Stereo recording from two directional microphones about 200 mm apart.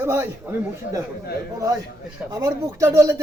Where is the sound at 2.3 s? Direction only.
15° right (ahead or behind).